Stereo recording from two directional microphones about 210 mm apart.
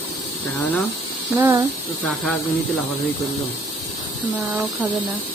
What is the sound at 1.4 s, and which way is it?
Speech, 10° right (ahead or behind).